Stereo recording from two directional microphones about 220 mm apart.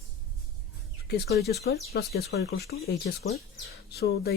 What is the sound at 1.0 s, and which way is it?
Speech, 45° left (ahead or behind).